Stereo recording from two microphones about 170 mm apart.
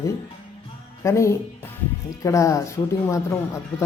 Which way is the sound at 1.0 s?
15° left (ahead or behind).